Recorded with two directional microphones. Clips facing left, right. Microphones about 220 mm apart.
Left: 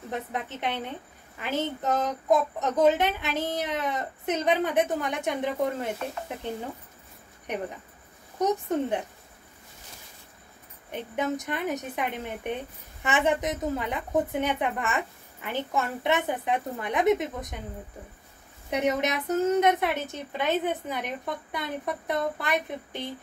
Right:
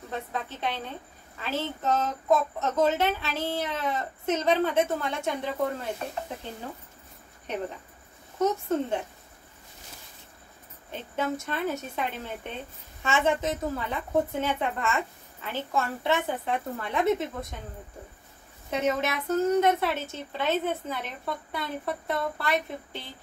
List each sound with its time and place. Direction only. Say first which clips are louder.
0.1 s a woman's voice: left 1 dB; 20° left (ahead or behind)
7.5 s speech: even; 15° left (ahead or behind)
10.9 s speech: left 1 dB; 15° left (ahead or behind)
18.7 s speech: left 1 dB; 20° left (ahead or behind)